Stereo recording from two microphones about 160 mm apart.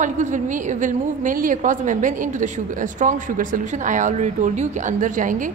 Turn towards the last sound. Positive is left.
turn(degrees=-55)  # may be behind; listen again after turning